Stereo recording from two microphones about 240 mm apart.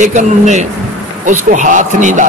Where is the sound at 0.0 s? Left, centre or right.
Right.